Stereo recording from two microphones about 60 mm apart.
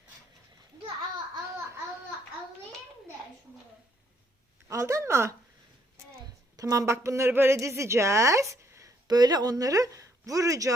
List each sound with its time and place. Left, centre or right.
4.7 s speech: right
6.6 s speech: right
6.8 s a woman's voice: right